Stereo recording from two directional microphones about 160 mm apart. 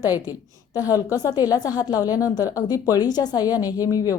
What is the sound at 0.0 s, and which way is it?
A woman's voice, 25° left (ahead or behind).